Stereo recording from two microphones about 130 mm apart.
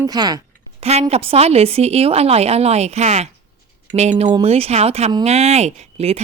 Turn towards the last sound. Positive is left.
turn(degrees=-55)  # may be behind; listen again after turning